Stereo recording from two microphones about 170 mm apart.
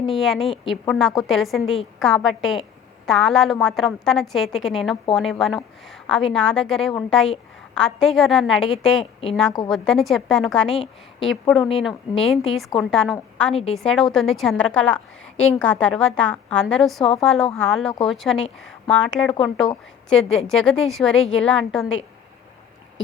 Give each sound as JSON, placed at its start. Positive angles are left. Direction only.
{"t": 0.0, "sound": "a woman's voice", "side_deg": 0}
{"t": 13.5, "sound": "a woman's voice", "side_deg": 35}
{"t": 13.7, "sound": "a woman's voice", "side_deg": 0}